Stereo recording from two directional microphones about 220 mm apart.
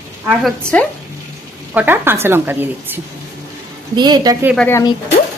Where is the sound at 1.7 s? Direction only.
10° right (ahead or behind).